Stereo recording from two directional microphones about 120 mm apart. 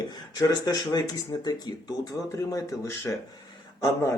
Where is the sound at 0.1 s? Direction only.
30° left (ahead or behind).